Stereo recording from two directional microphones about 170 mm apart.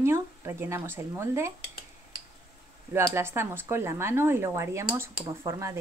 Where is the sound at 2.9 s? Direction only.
15° right (ahead or behind).